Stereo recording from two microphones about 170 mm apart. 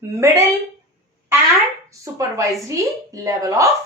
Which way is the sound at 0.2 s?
15° right (ahead or behind).